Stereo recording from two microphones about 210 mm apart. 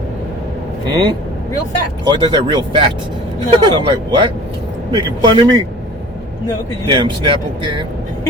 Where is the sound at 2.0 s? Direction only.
20° right (ahead or behind).